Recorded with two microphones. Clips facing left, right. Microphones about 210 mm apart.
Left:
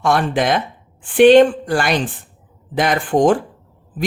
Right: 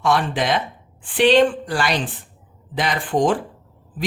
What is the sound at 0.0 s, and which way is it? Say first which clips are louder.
A woman's voice: left 3 dB; 50° left (ahead or behind).